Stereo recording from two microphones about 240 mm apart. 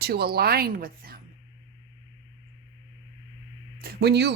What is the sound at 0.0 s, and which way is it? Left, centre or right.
Speech, right.